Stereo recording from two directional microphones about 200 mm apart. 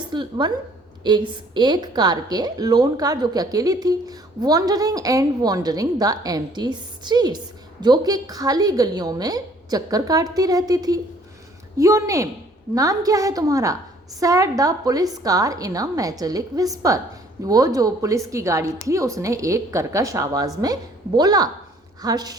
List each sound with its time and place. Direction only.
0.1 s a woman's voice: 20° right (ahead or behind)